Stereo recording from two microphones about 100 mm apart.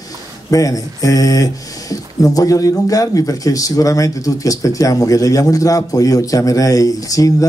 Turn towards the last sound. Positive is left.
turn(degrees=35)  # may be behind; listen again after turning